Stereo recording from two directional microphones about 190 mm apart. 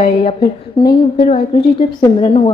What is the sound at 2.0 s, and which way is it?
Speech, 25° left (ahead or behind).